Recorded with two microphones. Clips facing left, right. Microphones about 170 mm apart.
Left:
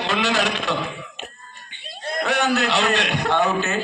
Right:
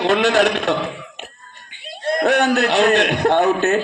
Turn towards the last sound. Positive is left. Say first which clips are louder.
# right 5 dB
turn(degrees=-60)  # may be behind; listen again after turning